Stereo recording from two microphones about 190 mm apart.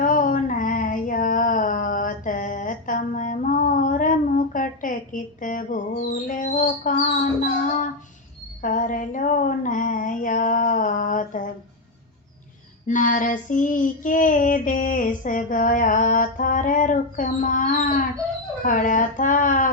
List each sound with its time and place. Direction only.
0.0 s female singing: 45° left (ahead or behind)
8.6 s a sound: 45° left (ahead or behind)
12.9 s child singing: 45° left (ahead or behind)